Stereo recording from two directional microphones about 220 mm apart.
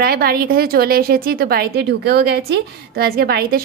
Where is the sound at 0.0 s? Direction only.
45° right (ahead or behind).